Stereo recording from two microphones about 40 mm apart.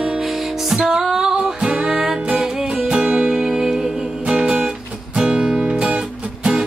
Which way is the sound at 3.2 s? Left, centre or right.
Centre.